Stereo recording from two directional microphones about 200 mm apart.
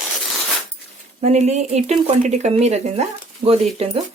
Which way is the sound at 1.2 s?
35° right (ahead or behind).